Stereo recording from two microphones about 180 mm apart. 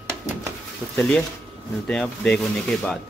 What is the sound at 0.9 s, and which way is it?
Speech, 5° left (ahead or behind).